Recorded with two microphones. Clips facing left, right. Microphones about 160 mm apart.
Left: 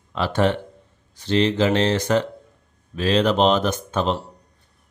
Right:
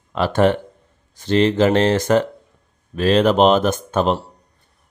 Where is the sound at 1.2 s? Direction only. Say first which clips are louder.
Right 4 dB; 50° right (ahead or behind).